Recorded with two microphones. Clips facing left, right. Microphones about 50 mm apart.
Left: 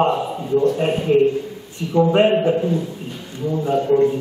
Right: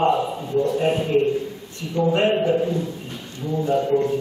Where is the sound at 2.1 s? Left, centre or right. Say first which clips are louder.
Left 1 dB; centre.